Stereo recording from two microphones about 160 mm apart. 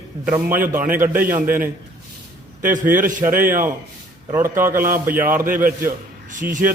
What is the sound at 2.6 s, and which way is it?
A man's voice, 55° right (ahead or behind).